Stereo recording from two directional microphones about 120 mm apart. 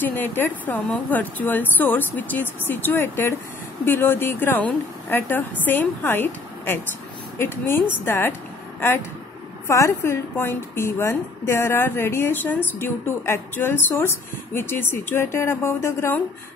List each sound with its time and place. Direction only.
0.0 s a woman's voice: 15° left (ahead or behind)
9.7 s a woman's voice: 25° left (ahead or behind)